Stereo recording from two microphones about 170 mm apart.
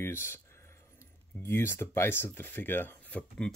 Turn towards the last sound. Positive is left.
turn(degrees=10)  # may be behind; listen again after turning